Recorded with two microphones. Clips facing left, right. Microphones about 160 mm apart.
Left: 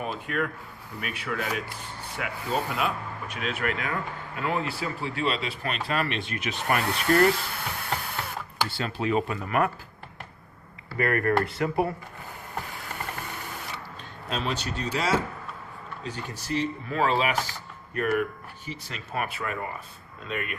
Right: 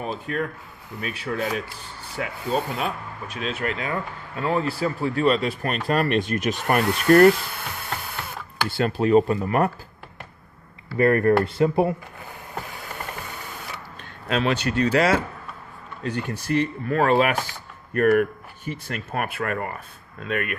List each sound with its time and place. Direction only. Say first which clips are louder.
0.0 s speech: right 2 dB; 35° right (ahead or behind); by 7.3 s 50° right (ahead or behind)
8.7 s speech: right 10 dB; 45° right (ahead or behind)
10.9 s speech: right 6 dB; 30° right (ahead or behind)
14.3 s speech: right 7 dB; 70° right (ahead or behind)